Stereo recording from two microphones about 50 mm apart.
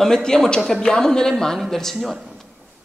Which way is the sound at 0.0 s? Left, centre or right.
Centre.